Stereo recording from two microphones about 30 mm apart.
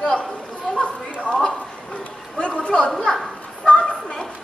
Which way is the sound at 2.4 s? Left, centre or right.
Left.